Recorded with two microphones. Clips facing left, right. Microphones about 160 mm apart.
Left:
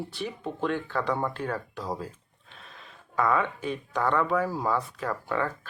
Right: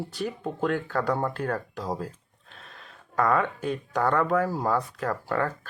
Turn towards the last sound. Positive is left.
turn(degrees=-45)  # may be behind; listen again after turning